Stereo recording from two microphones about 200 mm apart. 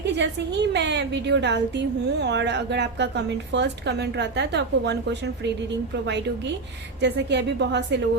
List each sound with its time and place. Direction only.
0.0 s a woman's voice: 60° right (ahead or behind)
7.0 s a woman's voice: 60° right (ahead or behind)